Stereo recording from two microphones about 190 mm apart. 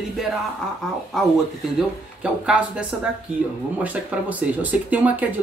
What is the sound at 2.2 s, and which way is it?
Speech, 5° right (ahead or behind).